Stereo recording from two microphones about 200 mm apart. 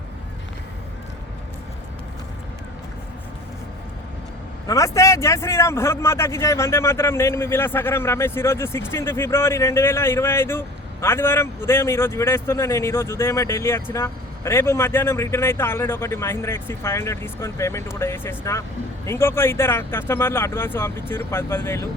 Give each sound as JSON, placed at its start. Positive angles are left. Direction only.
{"t": 4.6, "sound": "speech", "side_deg": 15}